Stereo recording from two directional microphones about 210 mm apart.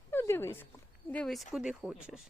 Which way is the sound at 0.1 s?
10° left (ahead or behind).